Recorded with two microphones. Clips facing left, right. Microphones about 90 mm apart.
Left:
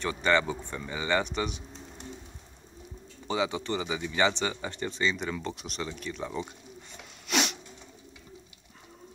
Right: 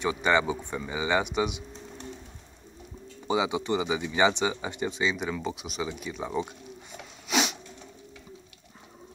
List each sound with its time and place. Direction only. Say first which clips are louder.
0.0 s speech: right 2 dB; 10° right (ahead or behind)
3.3 s speech: right 3 dB; 15° right (ahead or behind)